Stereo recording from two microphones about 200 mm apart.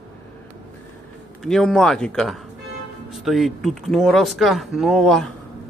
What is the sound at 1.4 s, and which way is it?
Speech, centre (ahead or behind).